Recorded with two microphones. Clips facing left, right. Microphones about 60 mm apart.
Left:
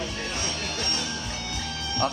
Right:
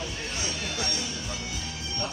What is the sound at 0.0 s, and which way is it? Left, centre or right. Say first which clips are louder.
Music: left 3 dB; left.